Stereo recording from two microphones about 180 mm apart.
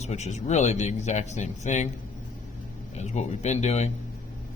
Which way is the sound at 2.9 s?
40° left (ahead or behind).